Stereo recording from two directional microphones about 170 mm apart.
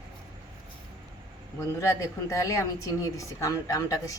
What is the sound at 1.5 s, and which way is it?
A woman's voice, 15° left (ahead or behind).